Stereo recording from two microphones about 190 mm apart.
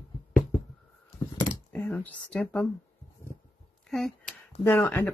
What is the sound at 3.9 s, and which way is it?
Speech, 5° left (ahead or behind).